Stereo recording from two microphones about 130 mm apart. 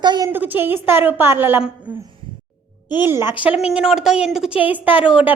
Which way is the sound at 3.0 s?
20° right (ahead or behind).